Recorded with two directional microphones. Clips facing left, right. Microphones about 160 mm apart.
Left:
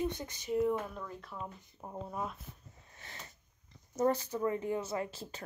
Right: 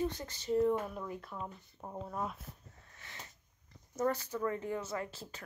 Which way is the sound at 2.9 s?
35° left (ahead or behind).